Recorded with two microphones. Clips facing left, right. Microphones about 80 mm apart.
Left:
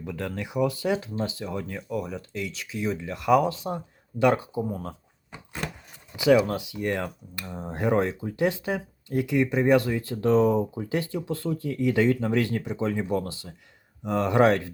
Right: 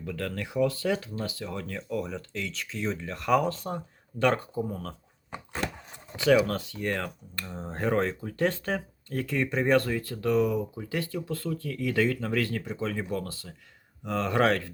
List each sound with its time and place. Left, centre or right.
0.0 s speech: centre
6.3 s speech: centre